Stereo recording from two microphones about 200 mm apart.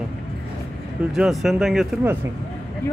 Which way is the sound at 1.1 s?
Centre (ahead or behind).